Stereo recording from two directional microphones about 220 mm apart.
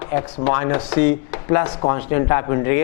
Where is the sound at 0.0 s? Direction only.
25° left (ahead or behind).